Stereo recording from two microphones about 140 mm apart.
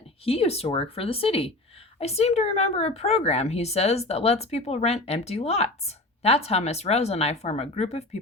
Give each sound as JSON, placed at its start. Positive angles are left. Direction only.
{"t": 0.3, "sound": "speech", "side_deg": 45}